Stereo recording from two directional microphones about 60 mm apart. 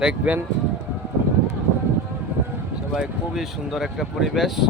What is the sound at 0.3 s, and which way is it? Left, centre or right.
Speech, right.